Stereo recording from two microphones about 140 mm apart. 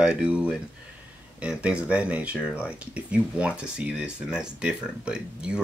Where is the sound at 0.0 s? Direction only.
10° right (ahead or behind).